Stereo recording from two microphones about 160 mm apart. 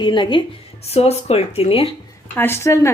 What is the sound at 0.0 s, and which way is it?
Speech, 30° left (ahead or behind).